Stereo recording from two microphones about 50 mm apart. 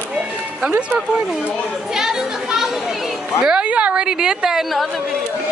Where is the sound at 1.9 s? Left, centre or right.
Centre.